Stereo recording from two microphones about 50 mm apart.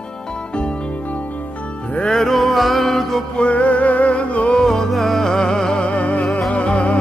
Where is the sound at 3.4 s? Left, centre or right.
Left.